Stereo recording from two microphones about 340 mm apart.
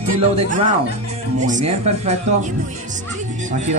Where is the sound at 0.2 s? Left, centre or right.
Centre.